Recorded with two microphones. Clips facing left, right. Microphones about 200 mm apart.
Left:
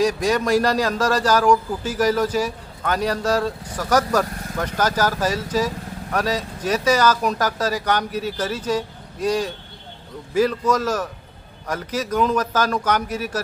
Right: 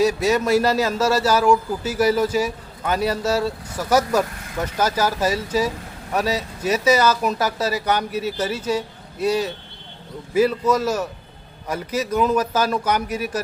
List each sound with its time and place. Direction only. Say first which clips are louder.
0.0 s speech: right 1 dB; 5° right (ahead or behind)